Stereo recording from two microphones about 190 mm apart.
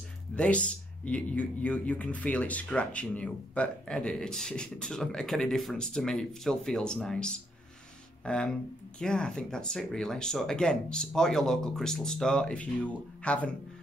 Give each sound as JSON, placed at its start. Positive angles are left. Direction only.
{"t": 0.4, "sound": "speech", "side_deg": 5}